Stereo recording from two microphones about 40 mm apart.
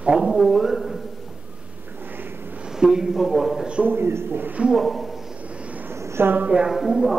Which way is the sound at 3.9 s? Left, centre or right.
Right.